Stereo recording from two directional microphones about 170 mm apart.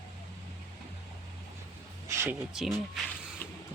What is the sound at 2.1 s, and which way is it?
Speech, 15° right (ahead or behind).